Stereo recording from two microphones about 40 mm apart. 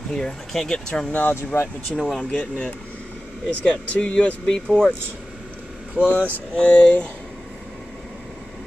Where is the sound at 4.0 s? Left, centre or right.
Left.